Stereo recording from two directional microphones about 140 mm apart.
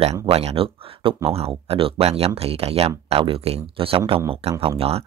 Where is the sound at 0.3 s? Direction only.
45° right (ahead or behind).